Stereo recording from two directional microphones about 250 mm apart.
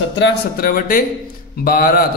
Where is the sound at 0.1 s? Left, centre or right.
Left.